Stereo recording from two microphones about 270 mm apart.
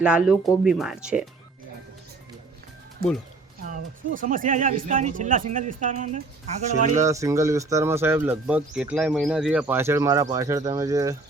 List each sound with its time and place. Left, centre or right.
0.0 s speech: centre
3.0 s speech: right
7.0 s speech: centre